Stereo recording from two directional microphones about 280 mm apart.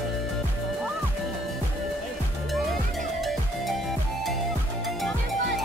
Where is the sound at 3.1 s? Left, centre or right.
Centre.